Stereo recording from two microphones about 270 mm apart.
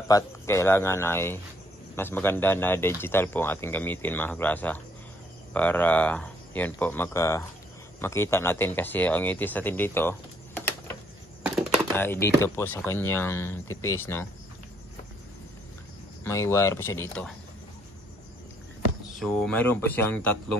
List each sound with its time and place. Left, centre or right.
0.1 s speech: centre
11.4 s a sound: centre
11.9 s speech: centre
16.3 s speech: centre
19.1 s speech: centre